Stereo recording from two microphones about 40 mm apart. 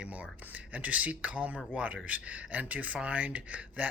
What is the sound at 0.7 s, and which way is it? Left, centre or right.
A man's voice, right.